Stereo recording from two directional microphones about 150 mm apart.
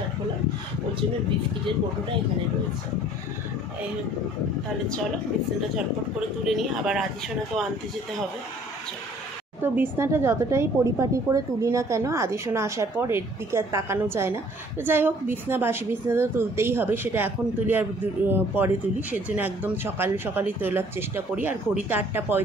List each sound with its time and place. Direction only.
6.4 s speech: centre (ahead or behind)
9.6 s speech: 15° right (ahead or behind)